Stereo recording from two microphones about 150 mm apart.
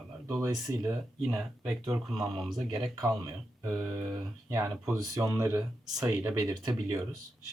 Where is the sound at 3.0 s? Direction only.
25° right (ahead or behind).